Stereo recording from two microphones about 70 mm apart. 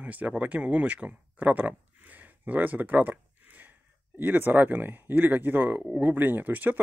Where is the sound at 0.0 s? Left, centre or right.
Right.